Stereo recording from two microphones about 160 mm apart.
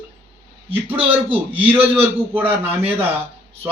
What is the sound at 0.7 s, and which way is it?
Speech, 35° right (ahead or behind).